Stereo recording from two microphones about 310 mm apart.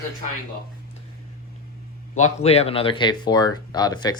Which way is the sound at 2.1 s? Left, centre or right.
Left.